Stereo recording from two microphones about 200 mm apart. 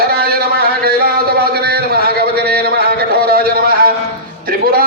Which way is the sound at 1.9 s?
50° right (ahead or behind).